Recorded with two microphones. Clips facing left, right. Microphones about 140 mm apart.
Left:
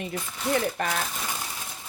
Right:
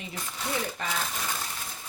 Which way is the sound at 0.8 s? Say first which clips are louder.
Left 5 dB; 60° left (ahead or behind).